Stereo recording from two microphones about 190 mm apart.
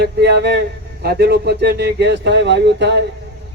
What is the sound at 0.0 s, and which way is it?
A man's voice, 60° right (ahead or behind).